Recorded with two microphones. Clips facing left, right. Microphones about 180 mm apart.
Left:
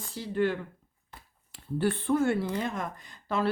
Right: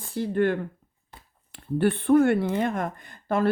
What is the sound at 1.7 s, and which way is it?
Speech, 60° right (ahead or behind).